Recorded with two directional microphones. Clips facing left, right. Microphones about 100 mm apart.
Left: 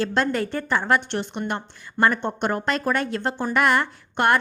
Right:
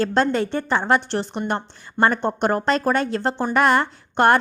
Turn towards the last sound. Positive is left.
turn(degrees=-35)  # may be behind; listen again after turning